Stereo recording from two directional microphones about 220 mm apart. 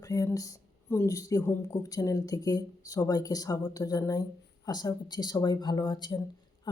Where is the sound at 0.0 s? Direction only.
15° left (ahead or behind).